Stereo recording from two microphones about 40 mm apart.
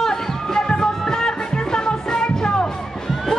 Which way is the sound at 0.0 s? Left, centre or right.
Centre.